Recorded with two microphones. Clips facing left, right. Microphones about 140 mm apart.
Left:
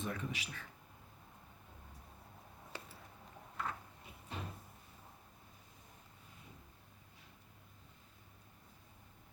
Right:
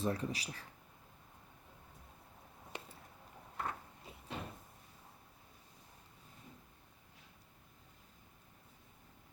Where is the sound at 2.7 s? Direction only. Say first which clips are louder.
Right 2 dB; 20° right (ahead or behind).